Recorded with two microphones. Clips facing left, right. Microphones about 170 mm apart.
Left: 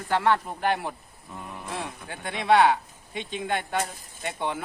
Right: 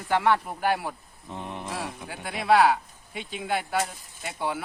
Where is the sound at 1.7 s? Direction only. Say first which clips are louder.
Even; 5° right (ahead or behind).